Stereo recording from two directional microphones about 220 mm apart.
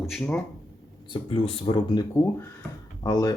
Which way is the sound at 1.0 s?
20° left (ahead or behind).